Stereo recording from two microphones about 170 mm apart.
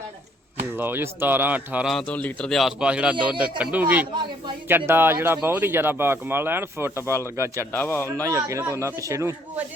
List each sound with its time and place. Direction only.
0.8 s speech: 10° right (ahead or behind)
1.9 s a man's voice: 5° left (ahead or behind); by 7.7 s 15° right (ahead or behind)
7.7 s speech: 15° left (ahead or behind)
8.3 s speech: 15° right (ahead or behind)